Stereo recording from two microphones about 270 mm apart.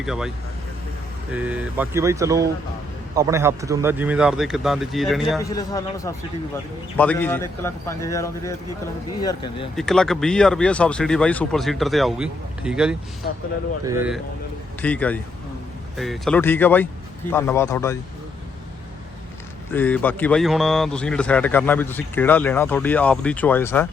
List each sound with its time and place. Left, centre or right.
0.0 s speech: centre
1.3 s speech: centre
5.4 s a man's voice: centre
9.7 s speech: centre
14.8 s a man's voice: centre
19.7 s a man's voice: centre